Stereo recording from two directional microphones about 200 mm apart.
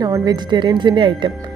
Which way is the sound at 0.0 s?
20° right (ahead or behind).